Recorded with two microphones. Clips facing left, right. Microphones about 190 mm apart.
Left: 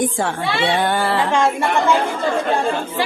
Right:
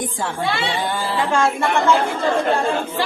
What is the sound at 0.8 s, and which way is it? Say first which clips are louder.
Speech: left 4 dB; 65° left (ahead or behind).